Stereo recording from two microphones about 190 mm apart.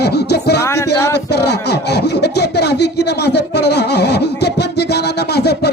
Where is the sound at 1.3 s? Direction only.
60° left (ahead or behind).